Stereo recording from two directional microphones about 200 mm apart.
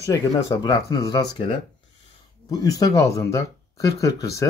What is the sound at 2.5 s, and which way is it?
Speech, 20° left (ahead or behind).